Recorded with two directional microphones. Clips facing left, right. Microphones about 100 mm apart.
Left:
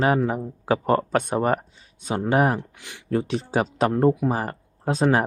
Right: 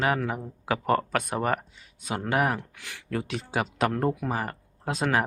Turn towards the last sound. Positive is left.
turn(degrees=30)  # may be behind; listen again after turning